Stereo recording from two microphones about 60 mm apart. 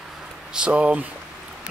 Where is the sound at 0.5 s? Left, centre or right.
Centre.